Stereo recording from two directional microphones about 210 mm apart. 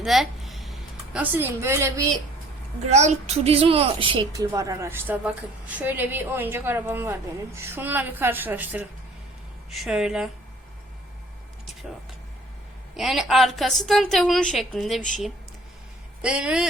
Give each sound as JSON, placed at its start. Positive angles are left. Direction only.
{"t": 0.0, "sound": "a sound", "side_deg": 0}
{"t": 2.8, "sound": "a woman's voice", "side_deg": -35}
{"t": 13.0, "sound": "a woman's voice", "side_deg": 0}
{"t": 16.2, "sound": "a woman's voice", "side_deg": -5}